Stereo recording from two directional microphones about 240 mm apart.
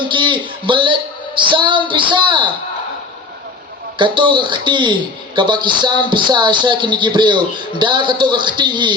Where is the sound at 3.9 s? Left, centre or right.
Centre.